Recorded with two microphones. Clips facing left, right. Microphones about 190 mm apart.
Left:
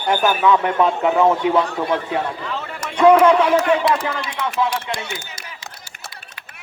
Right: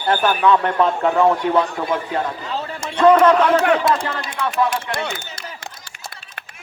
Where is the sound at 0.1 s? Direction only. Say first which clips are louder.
Even; 10° left (ahead or behind).